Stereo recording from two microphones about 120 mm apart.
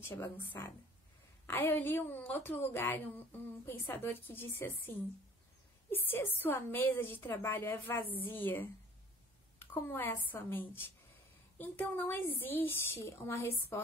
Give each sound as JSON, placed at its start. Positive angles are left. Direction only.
{"t": 0.0, "sound": "a woman's voice", "side_deg": 20}